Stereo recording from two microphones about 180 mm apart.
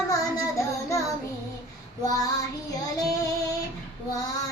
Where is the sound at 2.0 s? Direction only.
20° left (ahead or behind).